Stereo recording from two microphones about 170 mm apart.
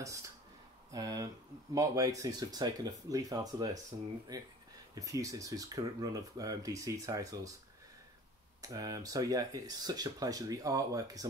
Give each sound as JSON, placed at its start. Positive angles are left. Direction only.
{"t": 0.9, "sound": "speech", "side_deg": -20}
{"t": 8.6, "sound": "speech", "side_deg": -20}